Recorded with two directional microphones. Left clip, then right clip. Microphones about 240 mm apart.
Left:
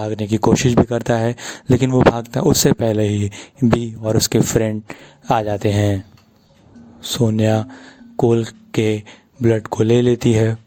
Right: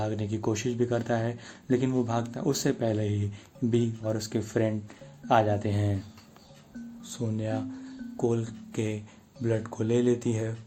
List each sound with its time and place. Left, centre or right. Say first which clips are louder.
0.0 s speech: left 12 dB; left
7.0 s speech: left 17 dB; left